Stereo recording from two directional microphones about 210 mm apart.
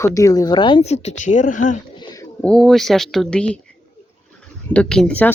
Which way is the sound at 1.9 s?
20° left (ahead or behind).